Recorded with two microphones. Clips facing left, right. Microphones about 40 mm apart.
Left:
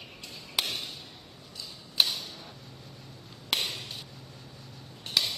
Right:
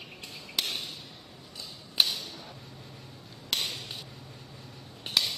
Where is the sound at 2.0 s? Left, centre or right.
Centre.